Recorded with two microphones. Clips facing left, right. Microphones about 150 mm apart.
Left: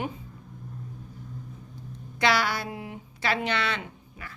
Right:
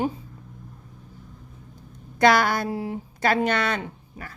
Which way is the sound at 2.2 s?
50° right (ahead or behind).